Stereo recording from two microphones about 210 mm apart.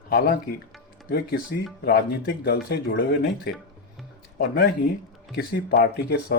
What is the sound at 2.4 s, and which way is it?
Speech, 50° left (ahead or behind).